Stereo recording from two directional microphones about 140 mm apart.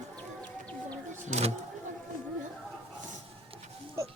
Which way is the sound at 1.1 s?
60° right (ahead or behind).